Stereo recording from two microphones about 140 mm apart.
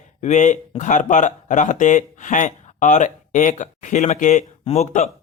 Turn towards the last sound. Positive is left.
turn(degrees=55)  # may be behind; listen again after turning